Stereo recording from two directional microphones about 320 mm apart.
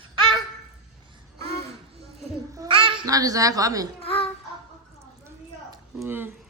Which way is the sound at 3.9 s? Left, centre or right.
Centre.